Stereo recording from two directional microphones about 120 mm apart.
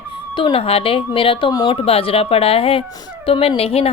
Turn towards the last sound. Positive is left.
turn(degrees=55)  # may be behind; listen again after turning